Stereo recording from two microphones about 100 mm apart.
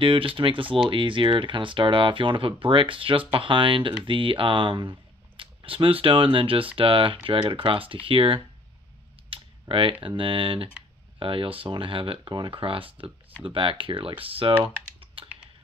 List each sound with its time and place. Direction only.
0.0 s speech: 60° right (ahead or behind)
9.3 s a sound: 60° right (ahead or behind)
10.0 s speech: 60° right (ahead or behind)
14.6 s typing: 65° right (ahead or behind)